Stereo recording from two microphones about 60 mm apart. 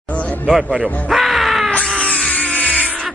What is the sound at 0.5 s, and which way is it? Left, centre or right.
Speech, centre.